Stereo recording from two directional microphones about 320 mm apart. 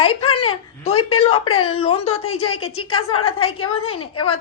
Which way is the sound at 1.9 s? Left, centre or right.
Left.